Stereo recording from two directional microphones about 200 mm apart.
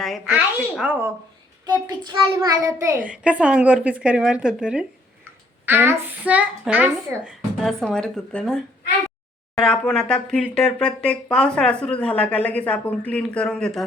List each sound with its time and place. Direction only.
0.3 s speech: 10° right (ahead or behind)
1.6 s a child's voice: 20° right (ahead or behind); by 13.8 s 5° left (ahead or behind)